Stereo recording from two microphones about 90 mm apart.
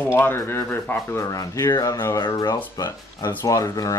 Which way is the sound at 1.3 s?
35° left (ahead or behind).